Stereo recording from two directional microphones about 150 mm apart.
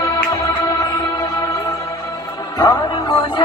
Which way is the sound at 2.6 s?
25° left (ahead or behind).